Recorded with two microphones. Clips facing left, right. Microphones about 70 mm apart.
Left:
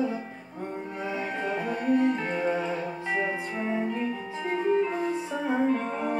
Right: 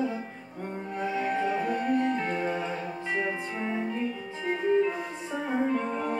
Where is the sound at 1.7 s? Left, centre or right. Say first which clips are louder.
Left 2 dB; centre.